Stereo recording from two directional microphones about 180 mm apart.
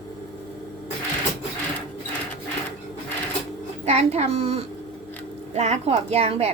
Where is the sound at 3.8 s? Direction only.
35° right (ahead or behind).